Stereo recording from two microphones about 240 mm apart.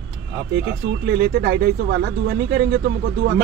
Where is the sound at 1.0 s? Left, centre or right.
Right.